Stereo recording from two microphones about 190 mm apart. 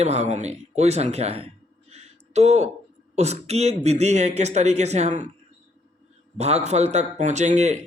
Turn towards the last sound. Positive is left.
turn(degrees=-35)  # may be behind; listen again after turning